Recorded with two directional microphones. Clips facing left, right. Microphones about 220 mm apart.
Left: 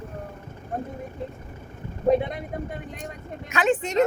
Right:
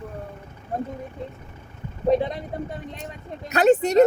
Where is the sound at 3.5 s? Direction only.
40° right (ahead or behind).